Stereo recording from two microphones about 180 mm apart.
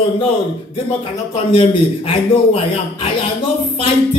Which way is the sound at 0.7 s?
30° left (ahead or behind).